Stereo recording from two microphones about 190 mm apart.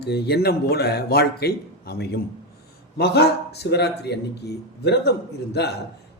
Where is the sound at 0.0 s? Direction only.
60° left (ahead or behind).